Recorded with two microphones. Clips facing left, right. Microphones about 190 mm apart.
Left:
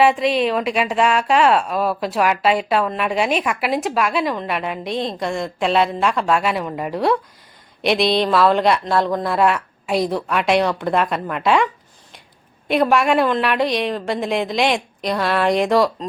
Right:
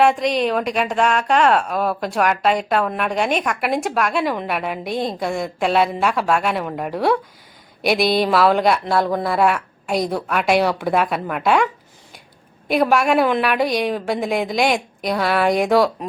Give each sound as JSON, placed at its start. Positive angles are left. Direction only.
{"t": 0.0, "sound": "a woman's voice", "side_deg": 0}